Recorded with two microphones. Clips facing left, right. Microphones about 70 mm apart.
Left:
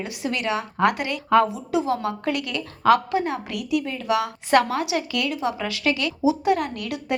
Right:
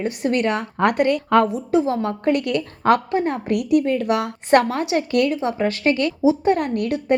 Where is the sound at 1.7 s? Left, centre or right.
Right.